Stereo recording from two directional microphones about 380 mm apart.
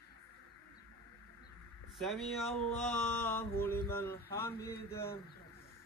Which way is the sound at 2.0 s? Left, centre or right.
Centre.